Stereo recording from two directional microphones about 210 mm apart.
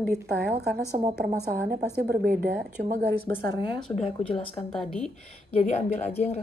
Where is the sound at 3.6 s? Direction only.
25° left (ahead or behind).